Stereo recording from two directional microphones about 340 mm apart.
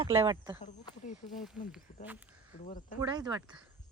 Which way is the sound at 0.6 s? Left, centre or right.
Centre.